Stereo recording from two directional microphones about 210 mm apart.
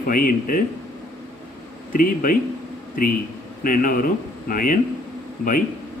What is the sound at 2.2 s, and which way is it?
Speech, 40° left (ahead or behind).